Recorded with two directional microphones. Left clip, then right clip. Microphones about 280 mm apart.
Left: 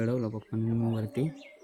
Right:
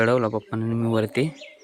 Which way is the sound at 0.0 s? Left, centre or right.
Right.